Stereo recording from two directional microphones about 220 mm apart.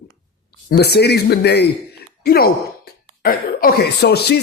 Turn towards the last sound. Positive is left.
turn(degrees=50)  # may be behind; listen again after turning